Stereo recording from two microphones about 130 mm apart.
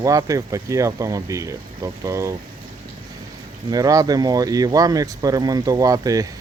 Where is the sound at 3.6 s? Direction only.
30° right (ahead or behind).